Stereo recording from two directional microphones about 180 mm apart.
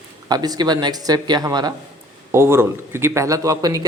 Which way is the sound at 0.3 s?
20° right (ahead or behind).